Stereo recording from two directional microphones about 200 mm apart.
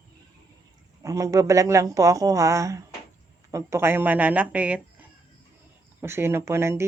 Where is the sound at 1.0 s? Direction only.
15° right (ahead or behind).